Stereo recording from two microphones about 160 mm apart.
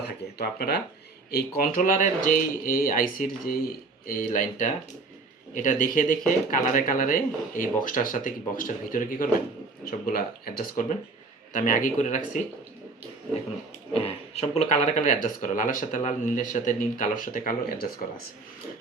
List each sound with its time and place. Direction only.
0.3 s speech: 85° left
1.3 s speech: 70° left (ahead or behind); by 12.4 s 50° left (ahead or behind)
13.9 s speech: 40° left (ahead or behind)